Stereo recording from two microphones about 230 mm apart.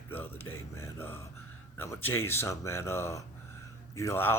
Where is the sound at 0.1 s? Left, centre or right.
Centre.